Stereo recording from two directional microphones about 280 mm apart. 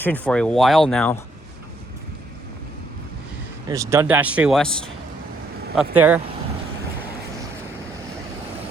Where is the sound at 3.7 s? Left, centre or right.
Centre.